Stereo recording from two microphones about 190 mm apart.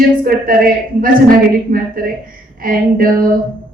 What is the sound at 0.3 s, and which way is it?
A woman's voice, 50° right (ahead or behind).